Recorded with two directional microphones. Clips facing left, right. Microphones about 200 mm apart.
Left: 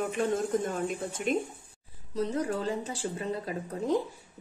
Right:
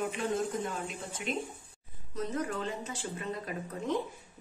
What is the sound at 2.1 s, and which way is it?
Speech, 30° left (ahead or behind).